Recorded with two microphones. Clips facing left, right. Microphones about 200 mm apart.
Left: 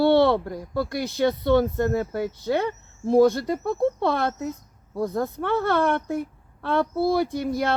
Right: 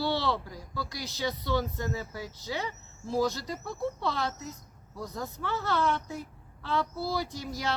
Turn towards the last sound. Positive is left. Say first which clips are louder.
# left 9 dB
turn(degrees=55)  # may be behind; listen again after turning